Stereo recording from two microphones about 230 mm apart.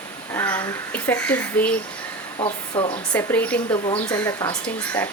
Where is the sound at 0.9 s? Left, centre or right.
Centre.